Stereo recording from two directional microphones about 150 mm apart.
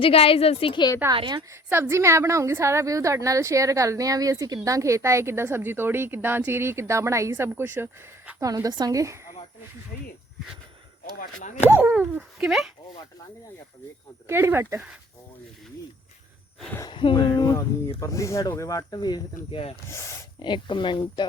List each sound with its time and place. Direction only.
0.0 s a woman's voice: 40° left (ahead or behind)
1.1 s a woman's voice: 35° right (ahead or behind)
1.4 s a woman's voice: 20° right (ahead or behind)
11.2 s speech: 65° left (ahead or behind)
11.7 s speech: 15° right (ahead or behind)
14.3 s speech: 15° right (ahead or behind)
16.9 s speech: 35° left (ahead or behind)
19.9 s speech: 20° left (ahead or behind)
20.4 s a woman's voice: 30° left (ahead or behind)